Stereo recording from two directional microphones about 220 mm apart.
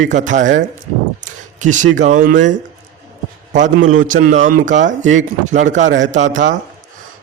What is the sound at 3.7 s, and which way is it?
Speech, 65° right (ahead or behind).